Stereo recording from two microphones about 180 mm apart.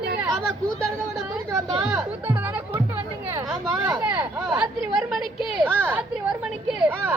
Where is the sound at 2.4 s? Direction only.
10° right (ahead or behind).